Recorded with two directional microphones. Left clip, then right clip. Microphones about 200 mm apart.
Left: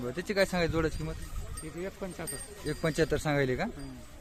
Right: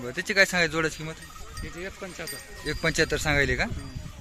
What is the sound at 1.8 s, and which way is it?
Speech, 45° left (ahead or behind).